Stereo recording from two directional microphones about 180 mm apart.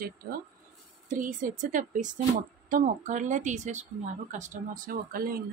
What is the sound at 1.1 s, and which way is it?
A woman's voice, 45° right (ahead or behind).